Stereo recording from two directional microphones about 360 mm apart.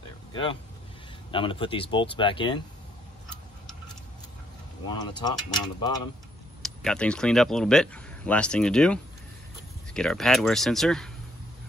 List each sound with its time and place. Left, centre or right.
0.3 s speech: centre
4.8 s speech: centre